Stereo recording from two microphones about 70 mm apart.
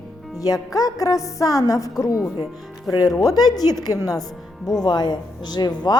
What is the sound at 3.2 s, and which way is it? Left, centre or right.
Speech, left.